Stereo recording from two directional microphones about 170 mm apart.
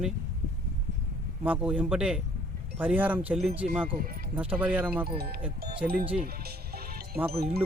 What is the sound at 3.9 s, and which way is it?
Speech, 55° right (ahead or behind).